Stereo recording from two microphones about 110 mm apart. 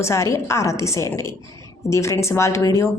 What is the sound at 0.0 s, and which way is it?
Speech, 25° left (ahead or behind).